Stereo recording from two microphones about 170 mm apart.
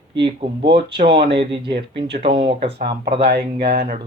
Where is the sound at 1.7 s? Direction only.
80° right.